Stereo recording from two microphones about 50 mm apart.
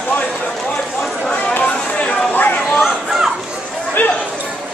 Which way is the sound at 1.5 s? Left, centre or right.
Left.